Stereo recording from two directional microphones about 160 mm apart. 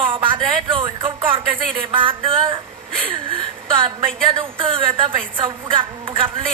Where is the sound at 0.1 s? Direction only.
35° right (ahead or behind).